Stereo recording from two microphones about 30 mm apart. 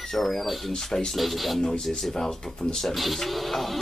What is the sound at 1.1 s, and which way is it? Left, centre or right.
Music, centre.